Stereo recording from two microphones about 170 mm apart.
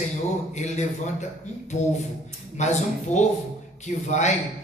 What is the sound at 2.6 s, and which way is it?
A man's voice, 45° left (ahead or behind).